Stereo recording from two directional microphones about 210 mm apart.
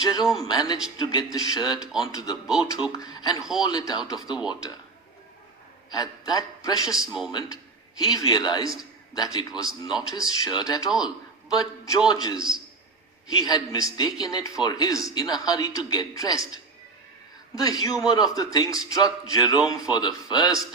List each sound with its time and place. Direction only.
0.0 s a man's voice: 20° left (ahead or behind)
5.9 s a man's voice: 20° left (ahead or behind)
13.4 s a man's voice: 15° left (ahead or behind)
17.5 s a man's voice: 15° left (ahead or behind)